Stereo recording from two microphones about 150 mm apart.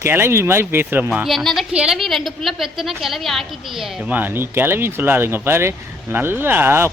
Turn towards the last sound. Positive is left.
turn(degrees=-15)  # may be behind; listen again after turning